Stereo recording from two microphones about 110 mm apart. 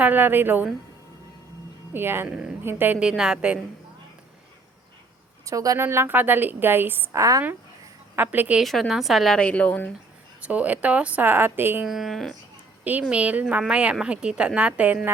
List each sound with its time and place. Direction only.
0.0 s speech: 15° right (ahead or behind)
1.9 s a woman's voice: 20° right (ahead or behind)
5.5 s a woman's voice: 30° right (ahead or behind)
8.1 s speech: 15° right (ahead or behind)
8.6 s a woman's voice: centre (ahead or behind)
10.4 s speech: 15° right (ahead or behind)
11.9 s a woman's voice: centre (ahead or behind)
12.8 s speech: 15° right (ahead or behind)